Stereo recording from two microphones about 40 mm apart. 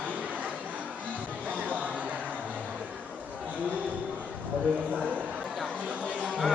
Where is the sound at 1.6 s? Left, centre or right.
Right.